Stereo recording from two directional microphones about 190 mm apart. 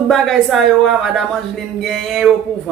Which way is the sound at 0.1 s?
Centre (ahead or behind).